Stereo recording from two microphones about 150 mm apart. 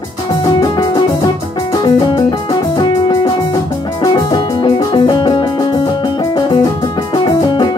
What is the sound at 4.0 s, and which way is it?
Music, 35° left (ahead or behind).